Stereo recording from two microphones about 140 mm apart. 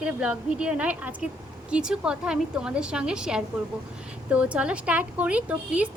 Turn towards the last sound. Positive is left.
turn(degrees=-10)  # may be behind; listen again after turning